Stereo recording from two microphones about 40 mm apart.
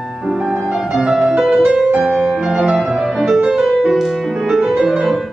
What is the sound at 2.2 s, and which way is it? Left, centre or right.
Music, centre.